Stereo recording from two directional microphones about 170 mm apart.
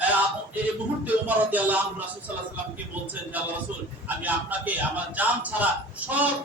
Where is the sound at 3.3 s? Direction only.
10° right (ahead or behind).